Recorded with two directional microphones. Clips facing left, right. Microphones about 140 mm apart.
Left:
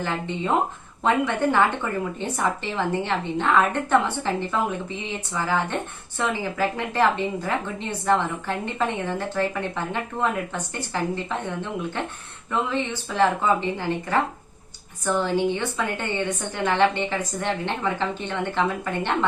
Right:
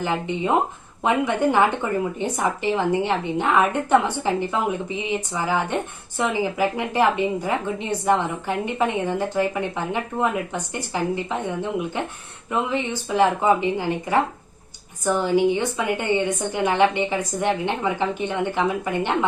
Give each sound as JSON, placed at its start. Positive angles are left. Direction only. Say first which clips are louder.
{"t": 0.0, "sound": "speech", "louder": "right 3 dB", "side_deg": -15}